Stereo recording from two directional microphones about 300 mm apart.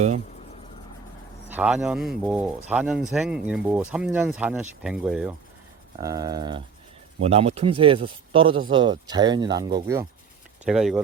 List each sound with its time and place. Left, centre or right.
1.5 s speech: centre